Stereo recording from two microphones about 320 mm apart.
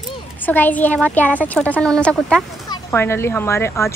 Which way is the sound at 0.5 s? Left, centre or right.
Centre.